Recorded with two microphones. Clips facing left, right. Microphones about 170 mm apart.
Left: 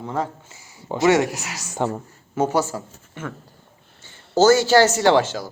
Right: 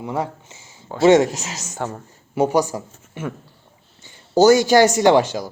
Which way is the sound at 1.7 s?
20° left (ahead or behind).